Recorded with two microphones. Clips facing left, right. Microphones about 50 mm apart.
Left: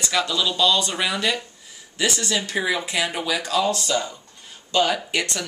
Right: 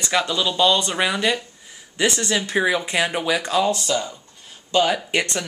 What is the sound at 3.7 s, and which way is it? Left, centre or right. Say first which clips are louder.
Speech: right 1 dB; centre.